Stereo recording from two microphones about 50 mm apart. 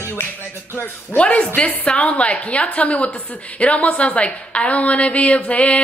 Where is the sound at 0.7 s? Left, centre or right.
Left.